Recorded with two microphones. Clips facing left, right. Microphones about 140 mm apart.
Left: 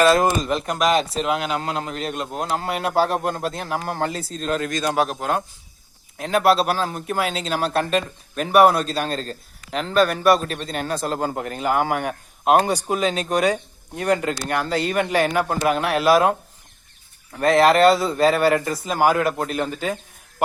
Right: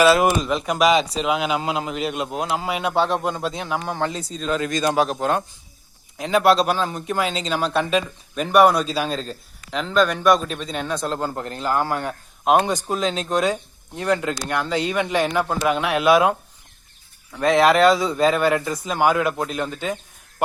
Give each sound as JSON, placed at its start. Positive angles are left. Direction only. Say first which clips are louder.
{"t": 0.0, "sound": "speech", "louder": "right 1 dB", "side_deg": -5}
{"t": 12.6, "sound": "speech", "louder": "left 1 dB", "side_deg": 10}
{"t": 14.4, "sound": "speech", "louder": "left 1 dB", "side_deg": 45}
{"t": 15.1, "sound": "speech", "louder": "left 1 dB", "side_deg": 10}
{"t": 17.3, "sound": "speech", "louder": "left 1 dB", "side_deg": 0}